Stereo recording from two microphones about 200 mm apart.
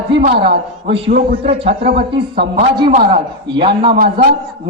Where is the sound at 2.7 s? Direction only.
25° right (ahead or behind).